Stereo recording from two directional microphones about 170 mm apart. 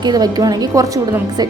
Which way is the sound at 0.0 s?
25° right (ahead or behind).